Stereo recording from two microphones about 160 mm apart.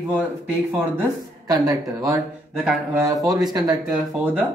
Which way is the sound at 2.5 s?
5° right (ahead or behind).